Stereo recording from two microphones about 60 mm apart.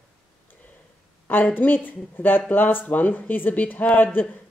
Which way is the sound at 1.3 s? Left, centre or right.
Left.